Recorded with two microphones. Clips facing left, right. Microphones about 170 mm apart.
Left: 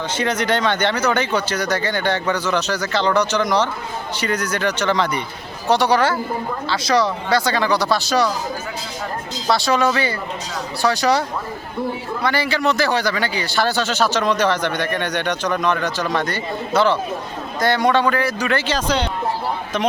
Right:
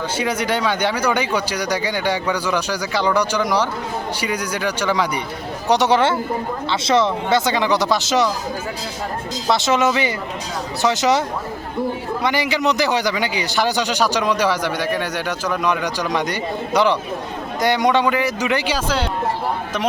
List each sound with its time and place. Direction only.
0.2 s a man's voice: 10° right (ahead or behind)
9.5 s speech: 20° right (ahead or behind)
12.2 s a man's voice: 15° right (ahead or behind)